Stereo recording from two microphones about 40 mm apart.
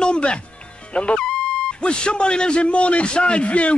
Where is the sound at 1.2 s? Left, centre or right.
Centre.